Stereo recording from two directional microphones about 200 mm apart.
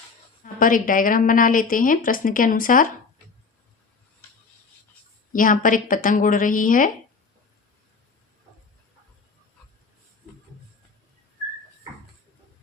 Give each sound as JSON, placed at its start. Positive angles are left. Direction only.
{"t": 0.4, "sound": "a woman's voice", "side_deg": 45}
{"t": 5.3, "sound": "a woman's voice", "side_deg": 40}